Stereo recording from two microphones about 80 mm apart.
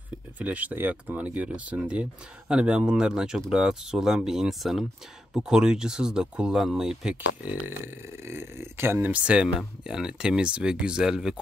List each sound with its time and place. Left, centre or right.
0.4 s speech: centre
7.8 s speech: right
9.1 s speech: centre